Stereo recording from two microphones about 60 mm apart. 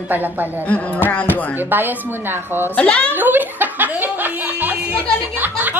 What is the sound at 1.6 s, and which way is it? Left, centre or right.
A woman's voice, right.